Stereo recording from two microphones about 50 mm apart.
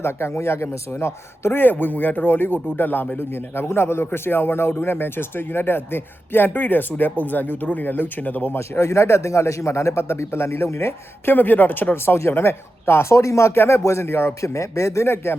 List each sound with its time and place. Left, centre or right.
0.0 s speech: left
1.7 s a man's voice: left
8.5 s a man's voice: left
11.3 s speech: left
12.1 s speech: left
14.4 s a man's voice: left